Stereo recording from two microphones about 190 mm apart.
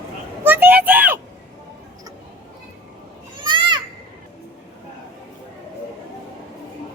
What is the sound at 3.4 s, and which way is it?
Children playing, 25° right (ahead or behind).